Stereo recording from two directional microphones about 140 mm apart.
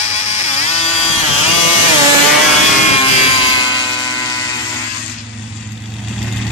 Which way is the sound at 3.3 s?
40° left (ahead or behind).